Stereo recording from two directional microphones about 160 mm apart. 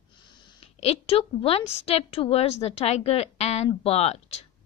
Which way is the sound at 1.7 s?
40° left (ahead or behind).